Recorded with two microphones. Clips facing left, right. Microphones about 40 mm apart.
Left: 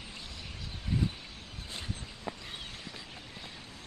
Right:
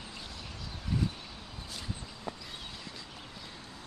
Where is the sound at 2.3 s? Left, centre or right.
Left.